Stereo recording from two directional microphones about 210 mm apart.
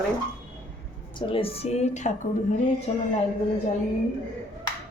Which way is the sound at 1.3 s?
25° left (ahead or behind).